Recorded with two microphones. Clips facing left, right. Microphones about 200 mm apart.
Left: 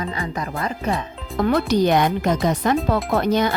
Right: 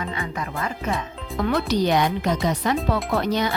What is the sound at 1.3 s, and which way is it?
Speech, 50° left (ahead or behind).